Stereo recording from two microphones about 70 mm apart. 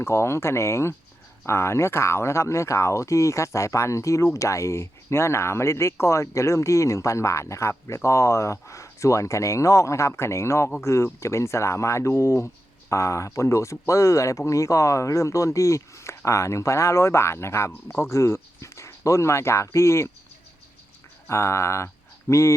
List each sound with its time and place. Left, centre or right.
0.0 s speech: left
21.2 s speech: left